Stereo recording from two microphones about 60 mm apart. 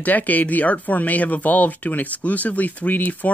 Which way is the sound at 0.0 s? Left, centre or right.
Left.